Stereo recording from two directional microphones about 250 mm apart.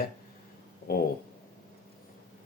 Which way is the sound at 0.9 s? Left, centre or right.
Left.